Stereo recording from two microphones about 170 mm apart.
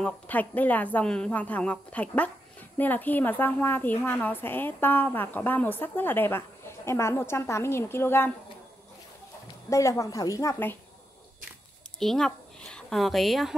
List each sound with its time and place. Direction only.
0.0 s a woman's voice: 10° left (ahead or behind)
9.7 s a woman's voice: 20° left (ahead or behind)
12.0 s a woman's voice: centre (ahead or behind)